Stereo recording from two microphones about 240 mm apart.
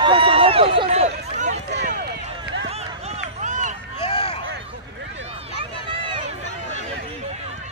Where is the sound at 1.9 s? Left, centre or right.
Right.